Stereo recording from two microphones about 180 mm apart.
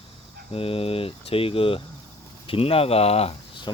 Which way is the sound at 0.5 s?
30° left (ahead or behind).